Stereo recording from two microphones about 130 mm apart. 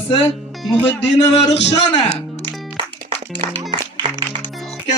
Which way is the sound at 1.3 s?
55° left (ahead or behind).